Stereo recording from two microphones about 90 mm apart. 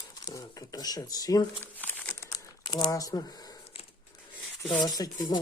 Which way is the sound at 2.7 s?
50° left (ahead or behind).